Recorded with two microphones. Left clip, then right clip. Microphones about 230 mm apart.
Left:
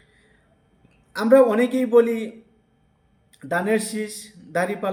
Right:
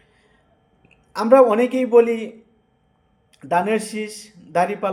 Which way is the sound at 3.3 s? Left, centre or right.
Centre.